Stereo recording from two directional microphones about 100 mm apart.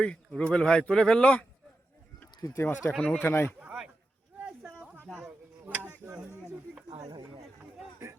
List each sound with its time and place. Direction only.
0.0 s speech: 10° left (ahead or behind)
2.5 s speech: 25° left (ahead or behind)
3.0 s speech: 10° left (ahead or behind)
3.2 s speech: 25° left (ahead or behind)
5.1 s tick-tock: 15° right (ahead or behind)
6.9 s a sound: 45° right (ahead or behind)